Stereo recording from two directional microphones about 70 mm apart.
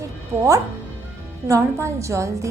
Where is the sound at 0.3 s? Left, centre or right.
Right.